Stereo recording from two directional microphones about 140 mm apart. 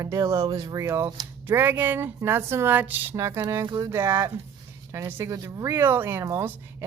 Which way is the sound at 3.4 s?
20° right (ahead or behind).